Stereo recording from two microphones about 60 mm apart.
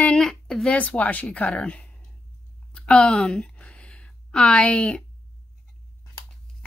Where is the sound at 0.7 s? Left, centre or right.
Left.